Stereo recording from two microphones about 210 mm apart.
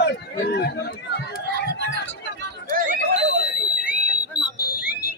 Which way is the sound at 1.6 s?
45° right (ahead or behind).